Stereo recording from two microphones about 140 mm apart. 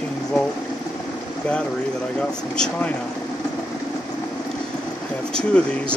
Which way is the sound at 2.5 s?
5° left (ahead or behind).